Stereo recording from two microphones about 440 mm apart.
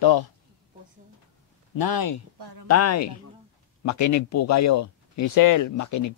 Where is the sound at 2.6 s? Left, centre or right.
Left.